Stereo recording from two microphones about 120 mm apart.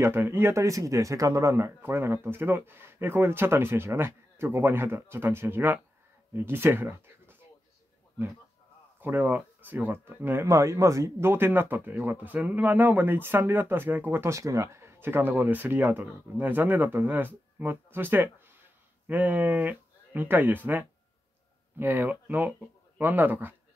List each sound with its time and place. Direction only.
0.0 s speech: 15° right (ahead or behind)
9.0 s speech: 15° right (ahead or behind)